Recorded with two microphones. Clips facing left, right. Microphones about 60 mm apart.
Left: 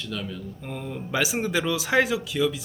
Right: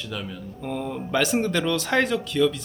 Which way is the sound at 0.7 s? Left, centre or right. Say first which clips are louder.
Right 3 dB; centre.